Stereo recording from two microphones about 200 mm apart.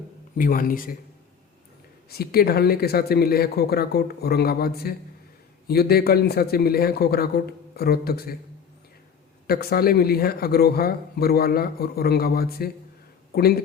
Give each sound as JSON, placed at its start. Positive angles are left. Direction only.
{"t": 0.3, "sound": "a man's voice", "side_deg": 45}
{"t": 2.0, "sound": "a man's voice", "side_deg": 50}
{"t": 9.5, "sound": "a man's voice", "side_deg": 50}